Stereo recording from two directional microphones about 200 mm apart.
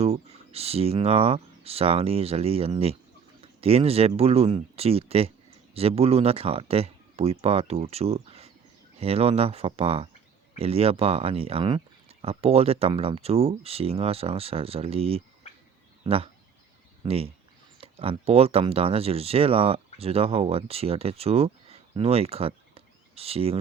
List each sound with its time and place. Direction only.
0.0 s speech: 30° right (ahead or behind)